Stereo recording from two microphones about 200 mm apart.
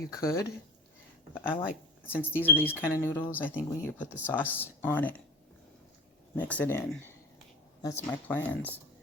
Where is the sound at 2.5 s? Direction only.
10° left (ahead or behind).